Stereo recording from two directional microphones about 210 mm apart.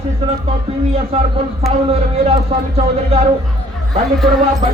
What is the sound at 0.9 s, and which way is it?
Speech, 30° right (ahead or behind).